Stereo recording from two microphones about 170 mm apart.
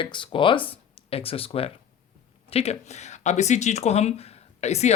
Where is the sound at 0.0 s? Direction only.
30° left (ahead or behind).